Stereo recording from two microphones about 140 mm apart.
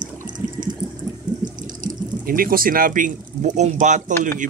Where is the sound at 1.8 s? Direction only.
80° right.